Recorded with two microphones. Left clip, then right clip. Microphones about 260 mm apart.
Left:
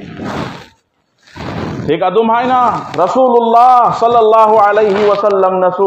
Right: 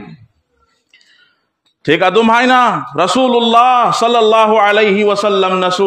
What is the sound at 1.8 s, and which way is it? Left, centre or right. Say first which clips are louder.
A man's voice: right 1 dB; right.